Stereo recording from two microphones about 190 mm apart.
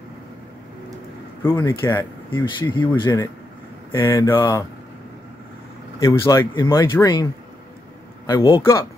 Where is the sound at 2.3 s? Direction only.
25° left (ahead or behind).